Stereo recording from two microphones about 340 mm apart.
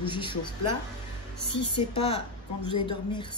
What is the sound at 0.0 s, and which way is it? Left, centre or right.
Speech, centre.